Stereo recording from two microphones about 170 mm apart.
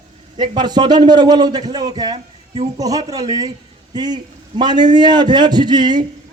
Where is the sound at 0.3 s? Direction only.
25° right (ahead or behind).